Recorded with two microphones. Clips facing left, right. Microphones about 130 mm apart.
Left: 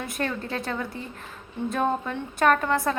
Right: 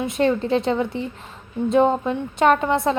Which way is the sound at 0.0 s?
20° right (ahead or behind).